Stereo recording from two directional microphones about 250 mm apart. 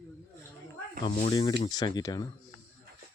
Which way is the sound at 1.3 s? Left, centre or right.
Centre.